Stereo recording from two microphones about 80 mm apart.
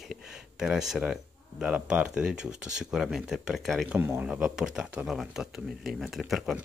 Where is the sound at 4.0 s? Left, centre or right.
Right.